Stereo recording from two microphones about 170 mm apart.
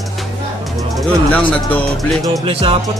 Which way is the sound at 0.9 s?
5° left (ahead or behind).